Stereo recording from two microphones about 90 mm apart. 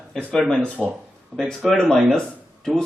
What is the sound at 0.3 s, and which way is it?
A man's voice, 10° left (ahead or behind).